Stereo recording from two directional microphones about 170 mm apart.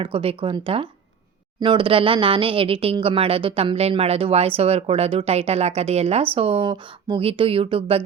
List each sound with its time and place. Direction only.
0.0 s speech: 30° right (ahead or behind)